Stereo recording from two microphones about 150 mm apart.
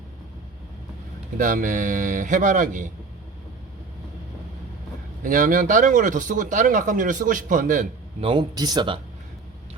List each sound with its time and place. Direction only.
1.4 s speech: 60° right (ahead or behind)
5.2 s speech: 60° right (ahead or behind)
8.2 s speech: 35° right (ahead or behind)